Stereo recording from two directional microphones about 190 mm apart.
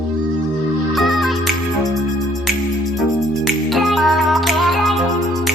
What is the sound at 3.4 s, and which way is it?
Music, centre (ahead or behind).